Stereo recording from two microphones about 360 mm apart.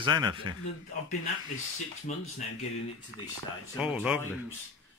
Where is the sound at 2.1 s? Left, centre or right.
Centre.